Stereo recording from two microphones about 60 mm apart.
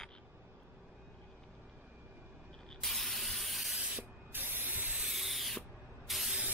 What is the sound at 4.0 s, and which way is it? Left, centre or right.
Spray, right.